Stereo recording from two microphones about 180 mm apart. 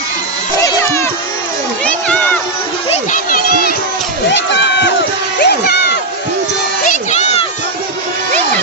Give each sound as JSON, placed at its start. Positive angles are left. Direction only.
{"t": 0.6, "sound": "cat", "side_deg": 15}
{"t": 1.8, "sound": "a sound", "side_deg": 5}
{"t": 2.9, "sound": "speech", "side_deg": 45}
{"t": 4.3, "sound": "speech", "side_deg": 80}
{"t": 5.4, "sound": "crowd", "side_deg": 65}
{"t": 6.8, "sound": "a sound", "side_deg": 40}